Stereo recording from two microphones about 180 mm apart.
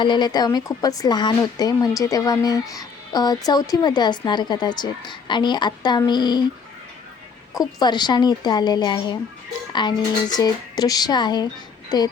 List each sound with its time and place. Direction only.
0.0 s speech: 25° left (ahead or behind)
7.8 s speech: 25° left (ahead or behind)